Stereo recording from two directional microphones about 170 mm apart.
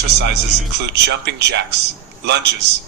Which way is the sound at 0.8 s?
85° right.